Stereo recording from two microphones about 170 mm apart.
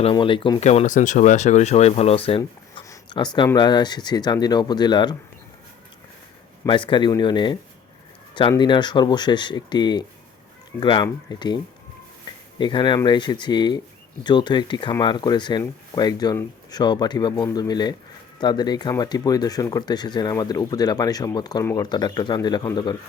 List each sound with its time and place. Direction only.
0.0 s speech: 30° left (ahead or behind)
0.6 s speech: 40° left (ahead or behind); by 5.1 s 25° left (ahead or behind)
6.7 s speech: 30° left (ahead or behind)